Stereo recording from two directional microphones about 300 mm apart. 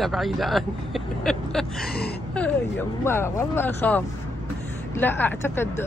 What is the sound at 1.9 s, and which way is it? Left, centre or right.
Gasp, left.